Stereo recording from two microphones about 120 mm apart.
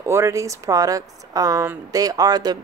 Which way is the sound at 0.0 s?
20° right (ahead or behind).